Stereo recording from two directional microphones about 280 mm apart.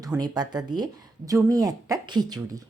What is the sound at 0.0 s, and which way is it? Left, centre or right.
A woman's voice, centre.